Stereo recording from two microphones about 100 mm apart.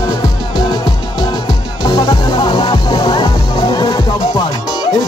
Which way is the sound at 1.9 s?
45° left (ahead or behind).